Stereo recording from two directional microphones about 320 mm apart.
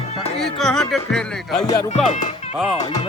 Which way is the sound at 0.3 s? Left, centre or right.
Centre.